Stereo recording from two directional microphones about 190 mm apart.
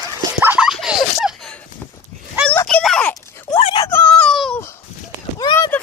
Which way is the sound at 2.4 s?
5° left (ahead or behind).